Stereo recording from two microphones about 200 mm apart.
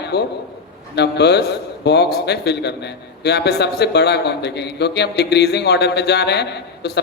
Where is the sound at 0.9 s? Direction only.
55° left (ahead or behind).